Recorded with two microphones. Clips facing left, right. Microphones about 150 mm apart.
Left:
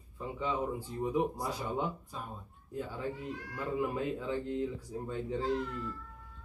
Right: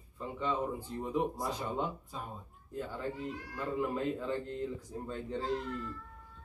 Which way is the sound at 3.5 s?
15° left (ahead or behind).